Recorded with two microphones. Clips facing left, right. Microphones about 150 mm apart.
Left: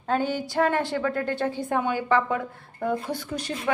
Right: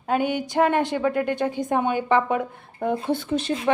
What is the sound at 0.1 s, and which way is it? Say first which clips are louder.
A woman's voice: right 2 dB; 15° right (ahead or behind).